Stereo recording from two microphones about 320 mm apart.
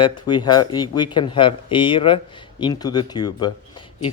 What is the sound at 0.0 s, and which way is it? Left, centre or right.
Speech, centre.